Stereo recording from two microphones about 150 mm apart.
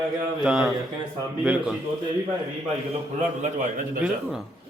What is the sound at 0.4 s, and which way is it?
Speech, 5° right (ahead or behind).